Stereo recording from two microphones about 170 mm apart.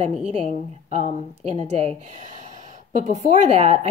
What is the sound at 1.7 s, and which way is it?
Speech, 40° right (ahead or behind).